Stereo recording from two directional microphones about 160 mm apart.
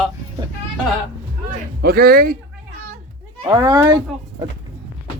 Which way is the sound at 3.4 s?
25° right (ahead or behind).